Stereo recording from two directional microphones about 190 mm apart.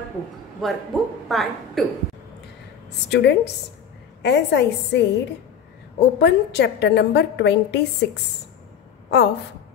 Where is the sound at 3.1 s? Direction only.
65° left (ahead or behind).